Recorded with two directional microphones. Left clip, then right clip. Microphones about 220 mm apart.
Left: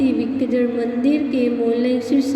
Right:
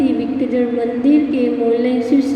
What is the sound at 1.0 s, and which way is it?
Music, 55° left (ahead or behind).